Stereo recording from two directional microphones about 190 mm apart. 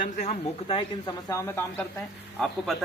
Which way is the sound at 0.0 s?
40° left (ahead or behind).